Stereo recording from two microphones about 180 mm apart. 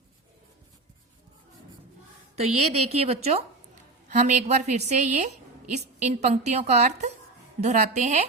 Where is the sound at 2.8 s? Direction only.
35° right (ahead or behind).